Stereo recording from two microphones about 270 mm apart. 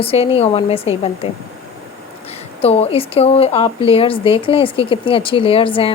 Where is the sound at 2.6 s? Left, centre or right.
Left.